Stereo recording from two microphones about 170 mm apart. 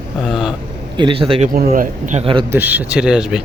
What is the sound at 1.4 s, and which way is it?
Speech, 60° right (ahead or behind).